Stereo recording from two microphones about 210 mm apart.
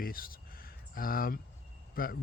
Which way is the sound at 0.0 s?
45° left (ahead or behind).